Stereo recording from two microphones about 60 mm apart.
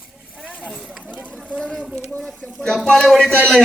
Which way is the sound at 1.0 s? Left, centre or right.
Centre.